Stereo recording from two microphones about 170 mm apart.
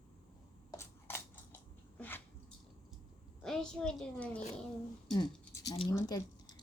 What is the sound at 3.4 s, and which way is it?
A child's voice, 5° left (ahead or behind).